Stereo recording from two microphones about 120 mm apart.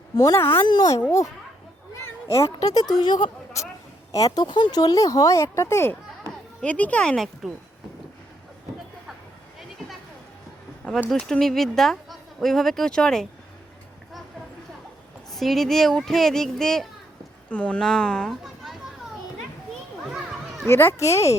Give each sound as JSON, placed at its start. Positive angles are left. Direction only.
{"t": 0.2, "sound": "speech", "side_deg": 30}
{"t": 2.3, "sound": "speech", "side_deg": 25}
{"t": 11.1, "sound": "speech", "side_deg": 5}
{"t": 15.3, "sound": "speech", "side_deg": 0}
{"t": 20.1, "sound": "children playing", "side_deg": -5}
{"t": 20.7, "sound": "speech", "side_deg": 20}